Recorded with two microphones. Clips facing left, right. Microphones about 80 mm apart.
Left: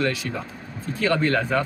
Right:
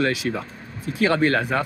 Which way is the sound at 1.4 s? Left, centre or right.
Centre.